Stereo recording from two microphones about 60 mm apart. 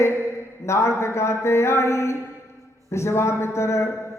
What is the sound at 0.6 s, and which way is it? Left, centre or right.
A man's voice, left.